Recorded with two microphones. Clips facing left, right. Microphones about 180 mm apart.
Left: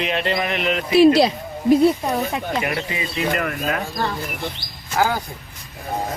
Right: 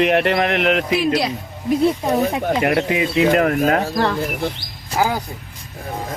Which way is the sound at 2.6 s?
65° right (ahead or behind).